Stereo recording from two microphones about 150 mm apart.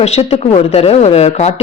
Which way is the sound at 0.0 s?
45° left (ahead or behind).